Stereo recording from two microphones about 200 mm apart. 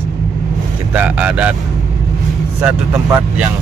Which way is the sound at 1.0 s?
5° right (ahead or behind).